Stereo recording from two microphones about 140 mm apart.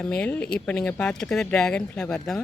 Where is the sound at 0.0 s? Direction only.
5° left (ahead or behind).